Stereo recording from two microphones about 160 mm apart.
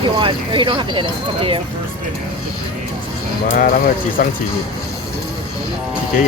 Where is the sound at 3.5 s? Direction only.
60° left (ahead or behind).